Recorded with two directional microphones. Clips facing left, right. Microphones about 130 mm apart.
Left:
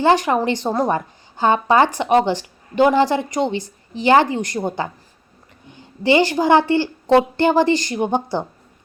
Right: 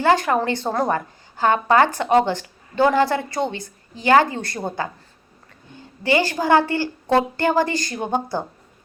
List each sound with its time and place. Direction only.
0.0 s a woman's voice: 20° left (ahead or behind)